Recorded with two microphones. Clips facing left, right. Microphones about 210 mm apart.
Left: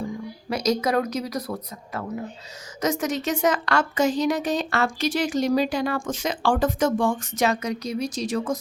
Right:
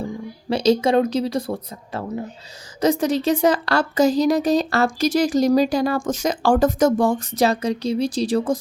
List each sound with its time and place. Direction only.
0.5 s speech: 30° right (ahead or behind)